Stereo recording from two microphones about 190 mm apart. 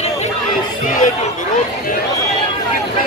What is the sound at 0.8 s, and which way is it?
Chatter, 45° left (ahead or behind).